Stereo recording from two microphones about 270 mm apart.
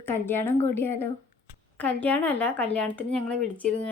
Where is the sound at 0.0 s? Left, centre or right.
Centre.